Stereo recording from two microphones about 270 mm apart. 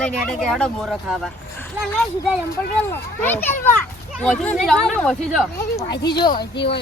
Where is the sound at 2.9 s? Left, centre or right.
Centre.